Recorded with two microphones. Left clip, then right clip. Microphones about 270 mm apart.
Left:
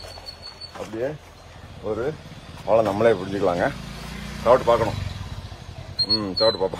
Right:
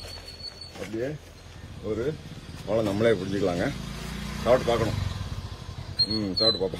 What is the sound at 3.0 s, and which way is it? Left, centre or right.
Speech, left.